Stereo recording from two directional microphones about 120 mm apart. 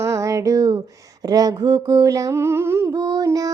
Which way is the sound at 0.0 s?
25° right (ahead or behind).